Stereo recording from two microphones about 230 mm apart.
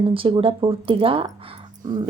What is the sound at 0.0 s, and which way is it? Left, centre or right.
Speech, right.